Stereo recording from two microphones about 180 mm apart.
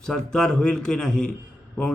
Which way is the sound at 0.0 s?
5° left (ahead or behind).